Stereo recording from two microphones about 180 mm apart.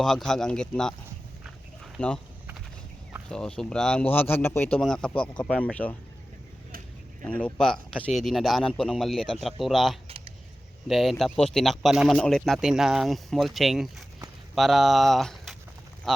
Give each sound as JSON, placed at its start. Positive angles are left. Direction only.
{"t": 0.0, "sound": "speech", "side_deg": 0}
{"t": 2.0, "sound": "speech", "side_deg": 5}
{"t": 3.2, "sound": "speech", "side_deg": 5}
{"t": 7.3, "sound": "speech", "side_deg": 5}
{"t": 10.1, "sound": "keys jangling", "side_deg": -30}
{"t": 10.8, "sound": "speech", "side_deg": 0}